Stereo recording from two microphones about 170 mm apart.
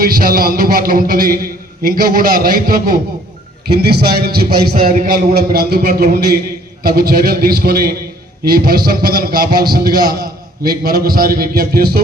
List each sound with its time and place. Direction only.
0.0 s a man's voice: 60° right (ahead or behind)
3.8 s speech: 70° right (ahead or behind)
4.9 s a man's voice: 50° right (ahead or behind)